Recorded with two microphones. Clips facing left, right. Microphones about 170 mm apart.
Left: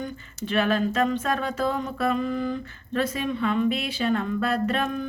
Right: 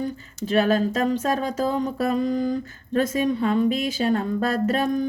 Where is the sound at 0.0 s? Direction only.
40° right (ahead or behind).